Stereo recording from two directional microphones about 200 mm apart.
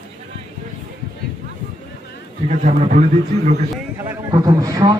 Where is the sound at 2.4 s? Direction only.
40° right (ahead or behind).